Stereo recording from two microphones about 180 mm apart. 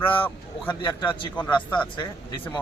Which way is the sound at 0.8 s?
25° left (ahead or behind).